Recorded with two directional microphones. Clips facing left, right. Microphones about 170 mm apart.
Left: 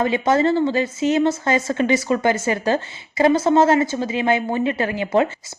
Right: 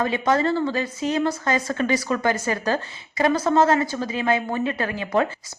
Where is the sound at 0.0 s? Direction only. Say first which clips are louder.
Left 3 dB; 25° left (ahead or behind).